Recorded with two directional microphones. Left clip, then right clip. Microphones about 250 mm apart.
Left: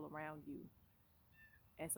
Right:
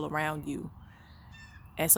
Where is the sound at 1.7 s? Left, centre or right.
Right.